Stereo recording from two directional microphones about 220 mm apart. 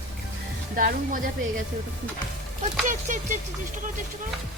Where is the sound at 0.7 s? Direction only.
40° right (ahead or behind).